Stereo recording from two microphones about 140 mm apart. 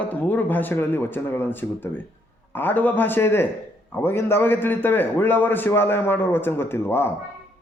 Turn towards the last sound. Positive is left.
turn(degrees=15)  # may be behind; listen again after turning